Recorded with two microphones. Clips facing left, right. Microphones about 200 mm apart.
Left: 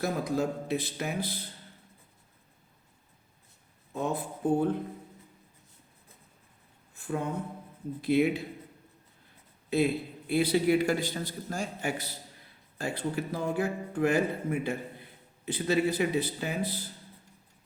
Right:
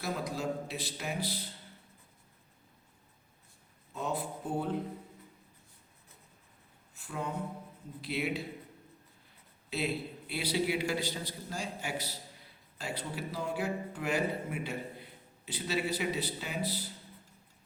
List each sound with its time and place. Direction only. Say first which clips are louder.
0.0 s a man's voice: left 6 dB; 50° left (ahead or behind)
3.9 s a man's voice: left 4 dB; 50° left (ahead or behind)
7.0 s a man's voice: left 5 dB; 50° left (ahead or behind)
9.6 s a man's voice: left 8 dB; 50° left (ahead or behind)